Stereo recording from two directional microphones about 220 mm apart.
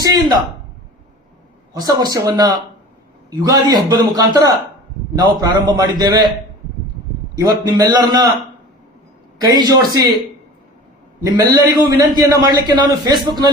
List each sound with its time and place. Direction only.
1.7 s a man's voice: 15° right (ahead or behind)
7.3 s a man's voice: 15° right (ahead or behind)
9.4 s a man's voice: 15° right (ahead or behind)
11.2 s a man's voice: 15° right (ahead or behind)